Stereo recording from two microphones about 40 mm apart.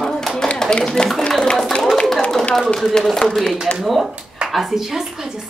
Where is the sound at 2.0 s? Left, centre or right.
Centre.